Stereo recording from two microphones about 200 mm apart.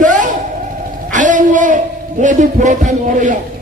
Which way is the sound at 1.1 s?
40° right (ahead or behind).